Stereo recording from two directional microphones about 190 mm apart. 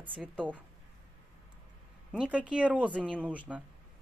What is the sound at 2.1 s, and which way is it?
Speech, 5° right (ahead or behind).